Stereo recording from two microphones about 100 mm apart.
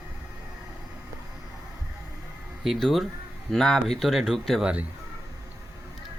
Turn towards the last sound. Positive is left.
turn(degrees=-5)  # may be behind; listen again after turning